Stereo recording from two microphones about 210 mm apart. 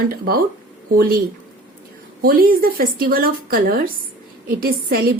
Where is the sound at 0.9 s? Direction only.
45° right (ahead or behind).